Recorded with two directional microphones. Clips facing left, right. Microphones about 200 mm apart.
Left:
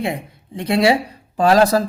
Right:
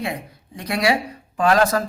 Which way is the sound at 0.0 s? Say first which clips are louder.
Left 4 dB; 25° left (ahead or behind).